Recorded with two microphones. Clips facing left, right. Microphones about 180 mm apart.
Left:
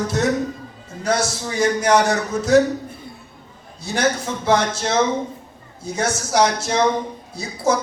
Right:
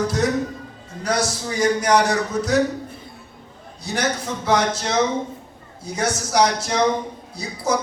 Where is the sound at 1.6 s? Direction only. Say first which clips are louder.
Left 1 dB; 25° left (ahead or behind).